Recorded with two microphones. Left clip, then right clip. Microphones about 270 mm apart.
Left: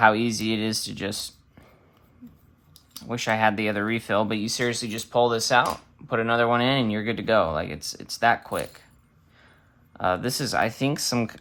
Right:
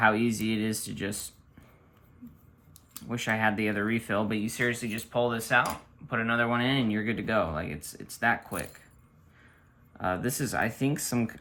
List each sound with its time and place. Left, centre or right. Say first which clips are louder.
0.0 s speech: left 5 dB; centre
3.1 s speech: left 5 dB; centre
10.0 s speech: left 6 dB; centre